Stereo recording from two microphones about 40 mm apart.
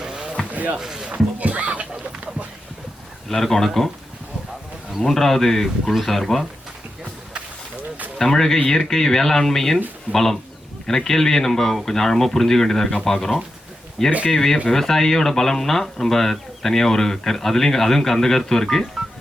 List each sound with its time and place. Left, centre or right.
0.0 s a sound: centre
0.5 s basketball bounce: right
0.8 s speech: centre
1.1 s a sound: right
3.2 s speech: centre
5.0 s speech: centre
8.2 s speech: centre